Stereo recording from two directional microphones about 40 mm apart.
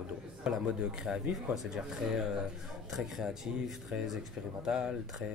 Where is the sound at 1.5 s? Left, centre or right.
Centre.